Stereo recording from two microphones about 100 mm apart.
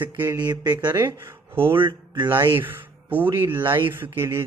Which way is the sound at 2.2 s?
25° right (ahead or behind).